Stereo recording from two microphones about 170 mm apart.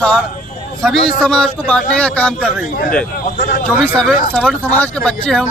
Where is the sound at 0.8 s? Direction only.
5° left (ahead or behind).